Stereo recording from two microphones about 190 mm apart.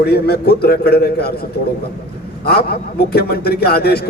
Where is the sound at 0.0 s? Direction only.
55° left (ahead or behind).